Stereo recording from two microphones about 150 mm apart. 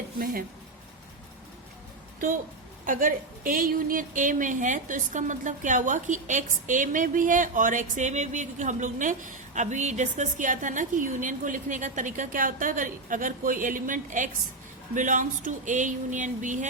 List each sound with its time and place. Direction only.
2.8 s a woman's voice: 65° right (ahead or behind)